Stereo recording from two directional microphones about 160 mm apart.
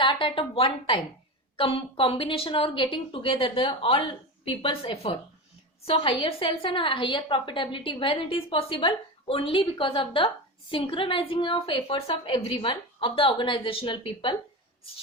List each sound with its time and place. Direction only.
0.0 s a woman's voice: 30° left (ahead or behind)